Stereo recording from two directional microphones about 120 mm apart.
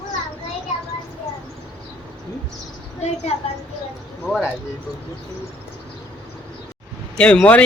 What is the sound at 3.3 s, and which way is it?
Speech, 55° left (ahead or behind).